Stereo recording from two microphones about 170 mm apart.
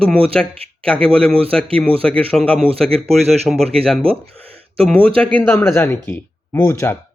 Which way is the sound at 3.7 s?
5° left (ahead or behind).